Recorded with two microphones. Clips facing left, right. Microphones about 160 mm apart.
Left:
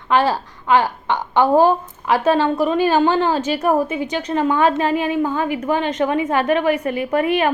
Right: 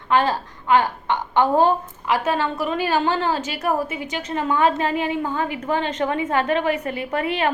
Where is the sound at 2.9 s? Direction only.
20° left (ahead or behind).